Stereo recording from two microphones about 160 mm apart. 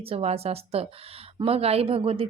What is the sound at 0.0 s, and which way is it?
Speech, 40° right (ahead or behind).